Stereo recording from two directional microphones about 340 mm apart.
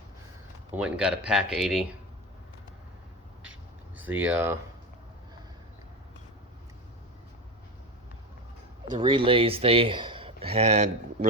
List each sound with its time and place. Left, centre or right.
0.8 s speech: centre
3.9 s speech: centre
8.9 s speech: centre